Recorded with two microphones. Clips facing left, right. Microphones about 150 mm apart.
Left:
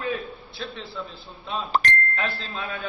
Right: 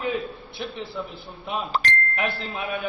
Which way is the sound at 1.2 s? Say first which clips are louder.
Even; 15° right (ahead or behind).